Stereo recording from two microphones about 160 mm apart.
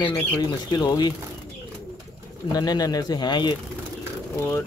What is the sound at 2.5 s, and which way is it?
Speech, 25° left (ahead or behind).